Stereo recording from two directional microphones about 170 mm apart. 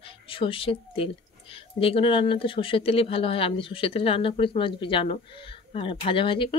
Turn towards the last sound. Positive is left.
turn(degrees=30)  # may be behind; listen again after turning